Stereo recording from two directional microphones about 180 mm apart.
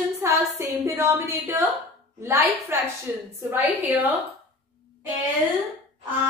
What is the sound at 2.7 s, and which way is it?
Speech, 15° right (ahead or behind).